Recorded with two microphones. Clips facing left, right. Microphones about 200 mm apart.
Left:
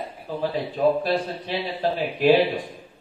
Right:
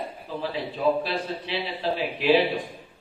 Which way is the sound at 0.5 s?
45° left (ahead or behind).